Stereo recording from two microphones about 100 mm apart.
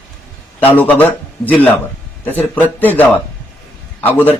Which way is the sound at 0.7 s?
15° left (ahead or behind).